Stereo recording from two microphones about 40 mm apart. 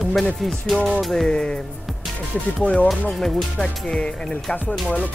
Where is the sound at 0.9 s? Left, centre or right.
Centre.